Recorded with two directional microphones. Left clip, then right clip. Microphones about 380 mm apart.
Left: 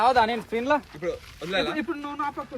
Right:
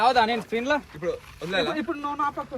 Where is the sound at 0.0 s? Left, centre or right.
Right.